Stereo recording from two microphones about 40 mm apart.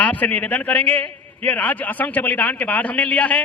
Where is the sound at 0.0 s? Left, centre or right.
Left.